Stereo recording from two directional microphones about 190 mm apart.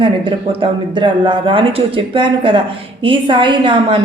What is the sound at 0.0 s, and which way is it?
A woman's voice, 25° right (ahead or behind).